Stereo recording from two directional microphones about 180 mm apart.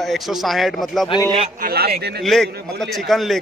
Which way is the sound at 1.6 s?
55° right (ahead or behind).